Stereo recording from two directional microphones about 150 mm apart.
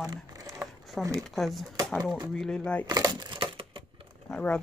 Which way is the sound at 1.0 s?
5° left (ahead or behind).